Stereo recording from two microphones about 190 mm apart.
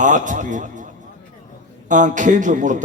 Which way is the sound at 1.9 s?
40° right (ahead or behind).